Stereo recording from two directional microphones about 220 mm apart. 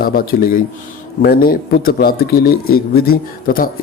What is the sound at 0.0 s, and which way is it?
Speech, 40° left (ahead or behind).